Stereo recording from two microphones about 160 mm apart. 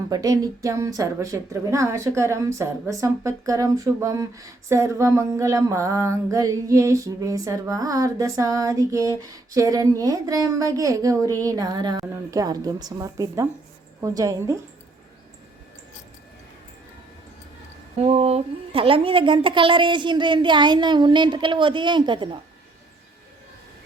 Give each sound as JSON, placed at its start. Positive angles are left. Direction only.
{"t": 0.1, "sound": "a woman's voice", "side_deg": -20}
{"t": 18.0, "sound": "a woman's voice", "side_deg": -40}